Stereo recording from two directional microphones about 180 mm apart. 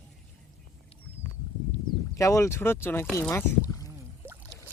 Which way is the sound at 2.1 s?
15° left (ahead or behind).